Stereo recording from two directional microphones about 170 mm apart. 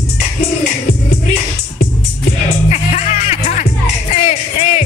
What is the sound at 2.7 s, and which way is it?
Music, 45° left (ahead or behind).